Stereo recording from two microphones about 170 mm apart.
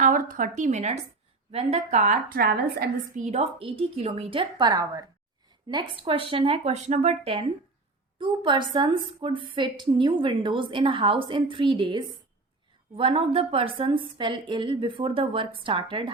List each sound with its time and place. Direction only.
0.0 s a woman's voice: 50° right (ahead or behind)
3.3 s a woman's voice: 35° right (ahead or behind)